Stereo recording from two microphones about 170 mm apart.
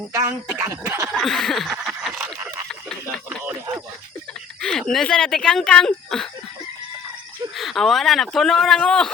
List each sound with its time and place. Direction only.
0.1 s speech: 15° right (ahead or behind)
1.1 s a sound: centre (ahead or behind)
4.6 s speech: 5° left (ahead or behind)
7.5 s speech: centre (ahead or behind)